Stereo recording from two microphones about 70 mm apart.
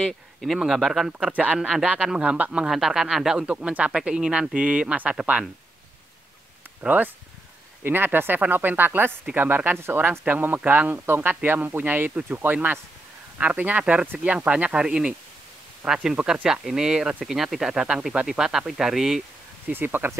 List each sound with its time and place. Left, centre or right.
0.0 s speech: centre
1.2 s speech: right
6.8 s speech: right; by 19.2 s centre
19.7 s speech: right